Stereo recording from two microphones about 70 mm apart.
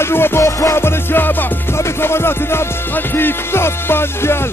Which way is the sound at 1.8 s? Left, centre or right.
Left.